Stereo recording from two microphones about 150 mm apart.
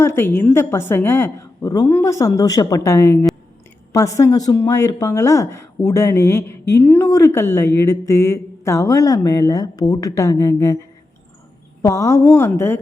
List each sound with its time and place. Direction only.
0.0 s a woman's voice: 15° left (ahead or behind)